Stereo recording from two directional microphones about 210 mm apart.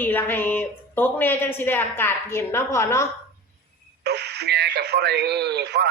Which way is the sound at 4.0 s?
55° right (ahead or behind).